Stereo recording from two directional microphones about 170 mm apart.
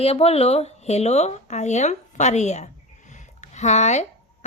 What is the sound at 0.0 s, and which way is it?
A woman's voice, 35° left (ahead or behind).